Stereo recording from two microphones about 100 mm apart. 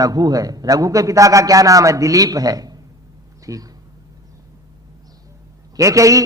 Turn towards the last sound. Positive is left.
turn(degrees=-35)  # may be behind; listen again after turning